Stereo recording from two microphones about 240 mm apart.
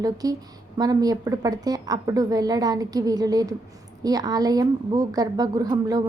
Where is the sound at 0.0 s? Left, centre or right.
Centre.